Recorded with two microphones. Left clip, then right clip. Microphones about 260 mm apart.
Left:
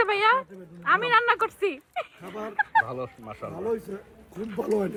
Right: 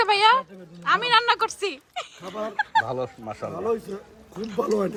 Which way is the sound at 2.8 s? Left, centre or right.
Right.